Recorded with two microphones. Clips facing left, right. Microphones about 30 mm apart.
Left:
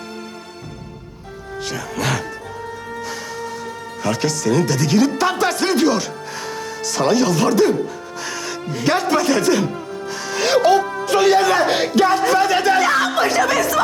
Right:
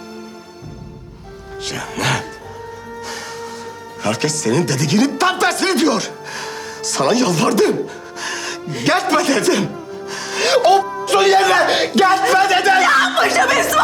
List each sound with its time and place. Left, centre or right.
1.6 s speech: centre
3.0 s music: centre
4.0 s speech: centre
10.1 s music: centre
11.0 s speech: centre